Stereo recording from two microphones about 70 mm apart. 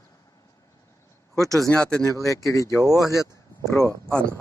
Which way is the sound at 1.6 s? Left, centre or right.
Centre.